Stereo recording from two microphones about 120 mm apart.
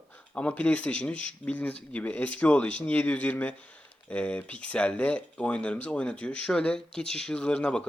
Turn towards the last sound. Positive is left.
turn(degrees=10)  # may be behind; listen again after turning